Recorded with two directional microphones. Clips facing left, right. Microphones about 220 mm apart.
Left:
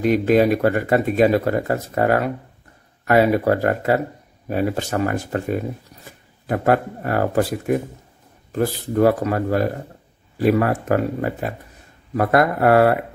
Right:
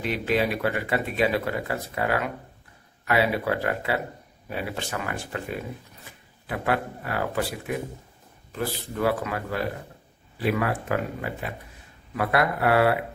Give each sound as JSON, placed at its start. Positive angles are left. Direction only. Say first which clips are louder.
{"t": 0.0, "sound": "speech", "louder": "left 9 dB", "side_deg": 45}